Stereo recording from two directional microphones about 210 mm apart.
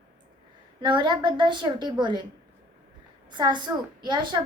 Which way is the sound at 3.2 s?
20° right (ahead or behind).